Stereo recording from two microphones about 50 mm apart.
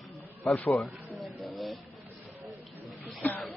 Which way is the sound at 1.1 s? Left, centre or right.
Centre.